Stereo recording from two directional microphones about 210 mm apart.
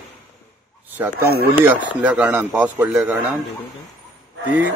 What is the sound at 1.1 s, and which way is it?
Speech, 45° right (ahead or behind).